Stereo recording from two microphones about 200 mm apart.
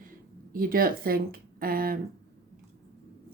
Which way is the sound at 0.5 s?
45° right (ahead or behind).